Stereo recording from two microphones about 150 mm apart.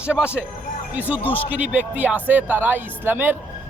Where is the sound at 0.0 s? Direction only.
5° right (ahead or behind).